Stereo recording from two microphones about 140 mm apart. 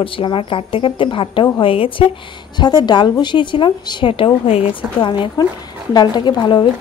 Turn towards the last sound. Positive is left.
turn(degrees=30)  # may be behind; listen again after turning